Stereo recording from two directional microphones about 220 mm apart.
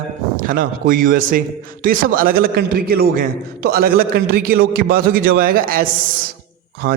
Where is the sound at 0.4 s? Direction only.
40° right (ahead or behind).